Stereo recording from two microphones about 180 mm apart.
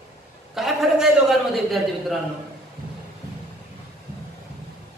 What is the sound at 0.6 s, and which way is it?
A man's voice, centre (ahead or behind).